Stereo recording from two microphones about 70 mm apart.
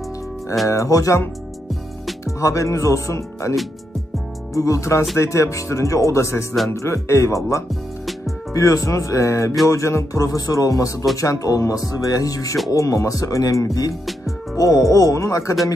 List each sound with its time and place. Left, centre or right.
0.7 s speech: left
2.2 s speech: left
4.6 s speech: left